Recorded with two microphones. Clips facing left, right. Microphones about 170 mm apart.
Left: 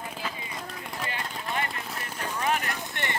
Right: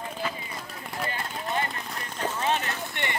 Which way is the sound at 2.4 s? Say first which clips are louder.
Left 1 dB; 30° right (ahead or behind).